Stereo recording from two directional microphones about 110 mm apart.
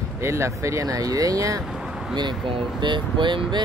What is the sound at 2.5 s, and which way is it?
Speech, 50° right (ahead or behind).